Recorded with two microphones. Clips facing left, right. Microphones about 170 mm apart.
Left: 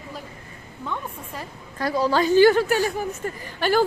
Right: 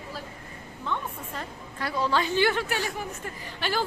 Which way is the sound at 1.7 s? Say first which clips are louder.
Left 5 dB; 40° left (ahead or behind).